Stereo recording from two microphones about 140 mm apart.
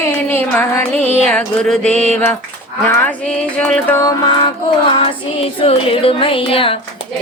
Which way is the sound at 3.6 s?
5° left (ahead or behind).